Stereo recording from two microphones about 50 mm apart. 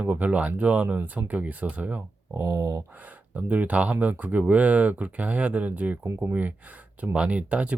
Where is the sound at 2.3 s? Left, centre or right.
Right.